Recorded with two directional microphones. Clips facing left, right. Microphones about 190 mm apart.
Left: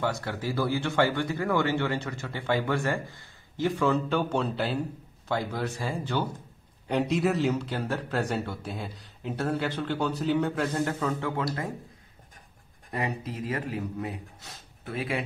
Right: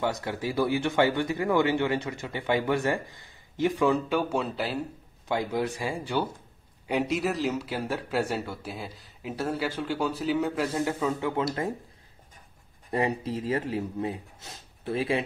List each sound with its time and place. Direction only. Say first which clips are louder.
0.0 s speech: right 1 dB; 15° right (ahead or behind)
6.9 s speech: left 2 dB; 5° right (ahead or behind)
11.1 s speech: right 2 dB; 20° right (ahead or behind)
12.9 s speech: right 5 dB; 30° right (ahead or behind)